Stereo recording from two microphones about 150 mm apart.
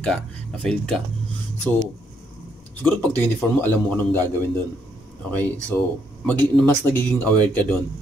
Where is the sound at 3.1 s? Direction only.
10° left (ahead or behind).